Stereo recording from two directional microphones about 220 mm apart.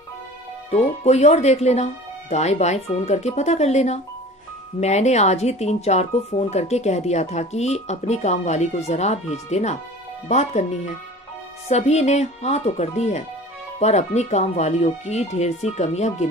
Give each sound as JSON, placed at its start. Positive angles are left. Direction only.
{"t": 0.7, "sound": "speech", "side_deg": 30}
{"t": 11.7, "sound": "speech", "side_deg": 30}